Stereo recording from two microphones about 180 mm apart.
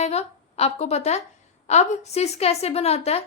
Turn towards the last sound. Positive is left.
turn(degrees=35)  # may be behind; listen again after turning